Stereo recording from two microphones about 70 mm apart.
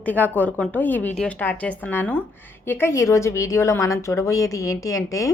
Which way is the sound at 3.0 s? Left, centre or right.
Left.